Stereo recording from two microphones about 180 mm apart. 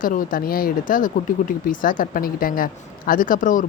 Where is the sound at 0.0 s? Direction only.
50° left (ahead or behind).